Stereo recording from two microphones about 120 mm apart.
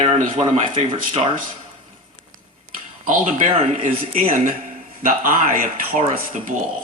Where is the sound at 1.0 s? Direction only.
90° right.